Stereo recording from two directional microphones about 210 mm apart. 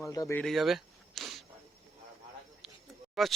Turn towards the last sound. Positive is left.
turn(degrees=0)  # may be behind; listen again after turning